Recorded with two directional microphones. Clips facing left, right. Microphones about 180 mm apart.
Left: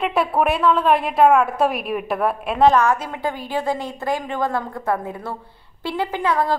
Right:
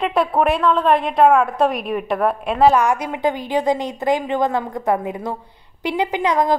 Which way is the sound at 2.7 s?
15° right (ahead or behind).